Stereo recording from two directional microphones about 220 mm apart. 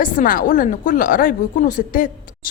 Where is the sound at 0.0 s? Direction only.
40° left (ahead or behind).